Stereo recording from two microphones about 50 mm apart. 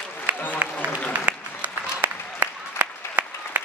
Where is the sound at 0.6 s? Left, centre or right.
Right.